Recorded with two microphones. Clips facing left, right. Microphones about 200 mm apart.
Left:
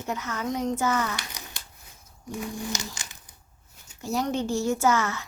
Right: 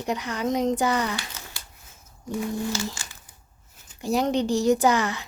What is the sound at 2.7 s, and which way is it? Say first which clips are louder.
Crumpling: right 5 dB; 20° left (ahead or behind).